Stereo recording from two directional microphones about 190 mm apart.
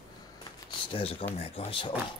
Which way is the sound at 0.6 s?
30° left (ahead or behind).